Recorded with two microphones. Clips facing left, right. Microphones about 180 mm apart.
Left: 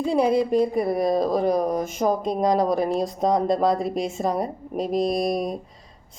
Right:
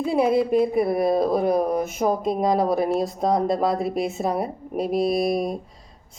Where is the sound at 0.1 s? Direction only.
5° right (ahead or behind).